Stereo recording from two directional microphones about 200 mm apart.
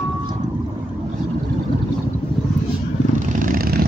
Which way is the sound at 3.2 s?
40° right (ahead or behind).